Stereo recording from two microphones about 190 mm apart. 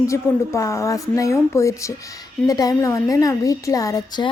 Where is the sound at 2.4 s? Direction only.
20° left (ahead or behind).